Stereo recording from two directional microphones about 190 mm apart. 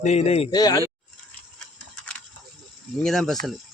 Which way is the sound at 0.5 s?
20° left (ahead or behind).